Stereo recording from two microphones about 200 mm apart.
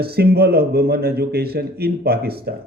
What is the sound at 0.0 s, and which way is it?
Speech, 50° right (ahead or behind).